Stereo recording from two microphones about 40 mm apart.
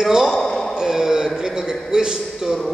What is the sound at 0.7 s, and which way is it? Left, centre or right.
A man's voice, centre.